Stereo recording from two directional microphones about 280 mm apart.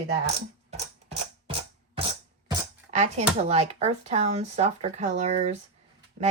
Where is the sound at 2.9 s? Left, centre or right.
Right.